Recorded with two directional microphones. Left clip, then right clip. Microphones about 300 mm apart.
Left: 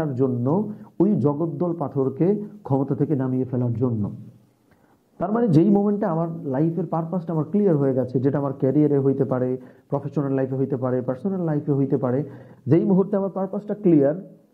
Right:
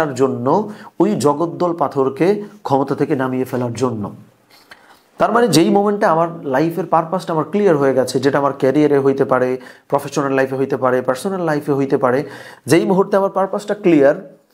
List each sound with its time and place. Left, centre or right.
0.0 s speech: centre
0.3 s speech: centre
5.1 s speech: centre